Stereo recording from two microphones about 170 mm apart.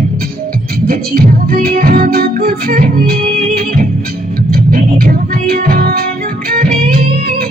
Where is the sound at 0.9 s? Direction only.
60° right (ahead or behind).